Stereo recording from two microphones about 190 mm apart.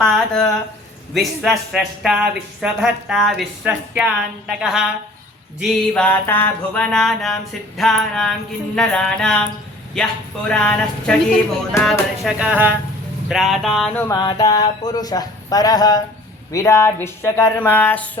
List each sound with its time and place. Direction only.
0.0 s speech: centre (ahead or behind)
5.9 s speech: 10° left (ahead or behind)
14.1 s speech: 20° left (ahead or behind)